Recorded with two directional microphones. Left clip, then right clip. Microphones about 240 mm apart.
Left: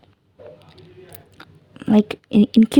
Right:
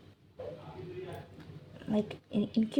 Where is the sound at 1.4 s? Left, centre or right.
Left.